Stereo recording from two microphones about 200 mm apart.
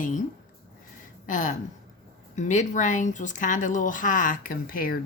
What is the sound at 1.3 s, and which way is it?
A woman's voice, 40° left (ahead or behind).